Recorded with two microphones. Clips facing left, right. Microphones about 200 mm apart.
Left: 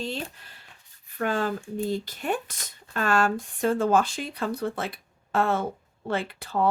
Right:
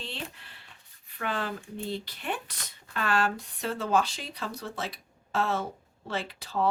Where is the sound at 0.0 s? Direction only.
40° left (ahead or behind).